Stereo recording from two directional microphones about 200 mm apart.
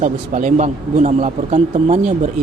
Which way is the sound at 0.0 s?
40° right (ahead or behind).